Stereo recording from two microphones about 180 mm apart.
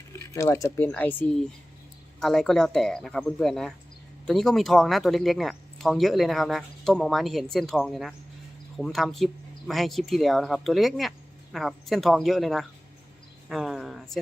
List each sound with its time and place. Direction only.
0.3 s speech: 15° left (ahead or behind); by 14.2 s centre (ahead or behind)